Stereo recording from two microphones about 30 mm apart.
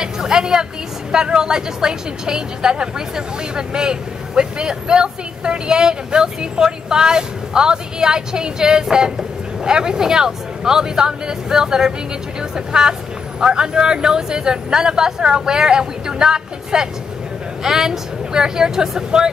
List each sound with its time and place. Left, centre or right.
0.0 s a woman's voice: centre